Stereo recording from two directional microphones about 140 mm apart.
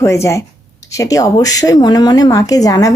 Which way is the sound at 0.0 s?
20° left (ahead or behind).